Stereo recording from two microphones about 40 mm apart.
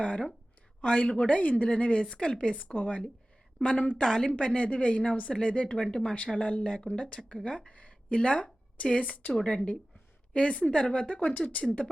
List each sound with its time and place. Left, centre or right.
0.0 s a woman's voice: left
3.6 s a woman's voice: left
4.4 s a woman's voice: left
11.2 s speech: left